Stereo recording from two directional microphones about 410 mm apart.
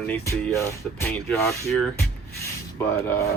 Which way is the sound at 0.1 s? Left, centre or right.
Centre.